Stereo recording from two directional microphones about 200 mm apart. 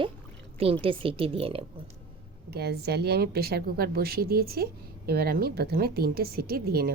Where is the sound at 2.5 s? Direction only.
55° right (ahead or behind).